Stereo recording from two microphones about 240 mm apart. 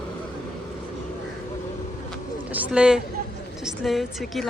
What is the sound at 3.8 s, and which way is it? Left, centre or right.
Speech, centre.